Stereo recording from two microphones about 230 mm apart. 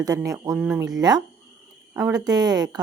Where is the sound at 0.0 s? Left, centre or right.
Centre.